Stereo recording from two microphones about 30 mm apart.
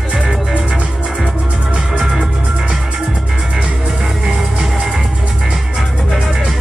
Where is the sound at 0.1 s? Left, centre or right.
Right.